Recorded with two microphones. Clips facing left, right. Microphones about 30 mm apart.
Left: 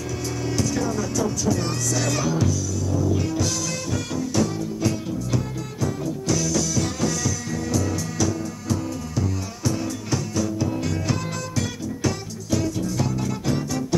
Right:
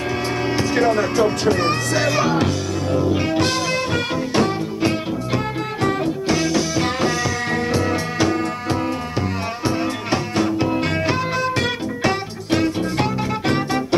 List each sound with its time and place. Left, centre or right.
0.6 s speech: right
2.3 s music: right